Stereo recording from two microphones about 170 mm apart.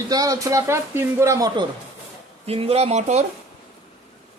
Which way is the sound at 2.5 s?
35° right (ahead or behind).